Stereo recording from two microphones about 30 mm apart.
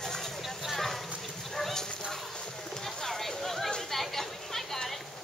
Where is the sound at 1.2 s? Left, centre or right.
Centre.